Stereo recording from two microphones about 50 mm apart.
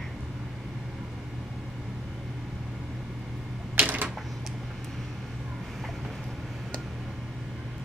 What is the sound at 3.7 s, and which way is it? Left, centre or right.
Typewriter, right.